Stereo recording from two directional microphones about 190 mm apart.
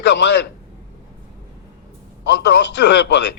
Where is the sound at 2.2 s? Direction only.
65° left (ahead or behind).